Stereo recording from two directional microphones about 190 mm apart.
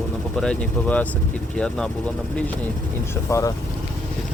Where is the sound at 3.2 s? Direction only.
15° left (ahead or behind).